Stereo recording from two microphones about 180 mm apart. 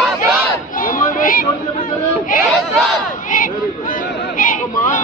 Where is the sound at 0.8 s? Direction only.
50° left (ahead or behind).